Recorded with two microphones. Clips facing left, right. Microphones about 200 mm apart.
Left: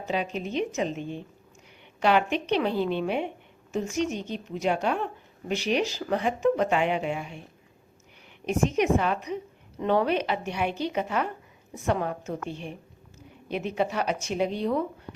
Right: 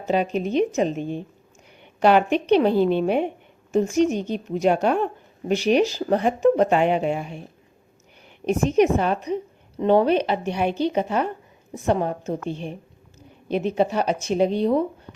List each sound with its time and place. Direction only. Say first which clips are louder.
0.1 s a woman's voice: right 8 dB; 45° right (ahead or behind)
8.4 s speech: right 5 dB; 40° right (ahead or behind)